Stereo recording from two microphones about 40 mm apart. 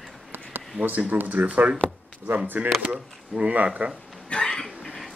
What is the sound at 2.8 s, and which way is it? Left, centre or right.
Speech, right.